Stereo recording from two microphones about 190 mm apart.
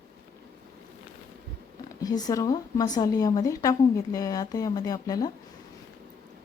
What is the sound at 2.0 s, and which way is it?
A woman's voice, 20° left (ahead or behind).